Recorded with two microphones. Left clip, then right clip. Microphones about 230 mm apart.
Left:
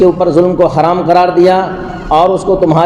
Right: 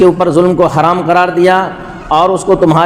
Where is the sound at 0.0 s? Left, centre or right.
Right.